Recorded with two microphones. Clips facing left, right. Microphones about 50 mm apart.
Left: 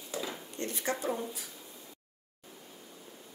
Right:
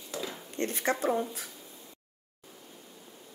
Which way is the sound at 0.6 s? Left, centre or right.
Right.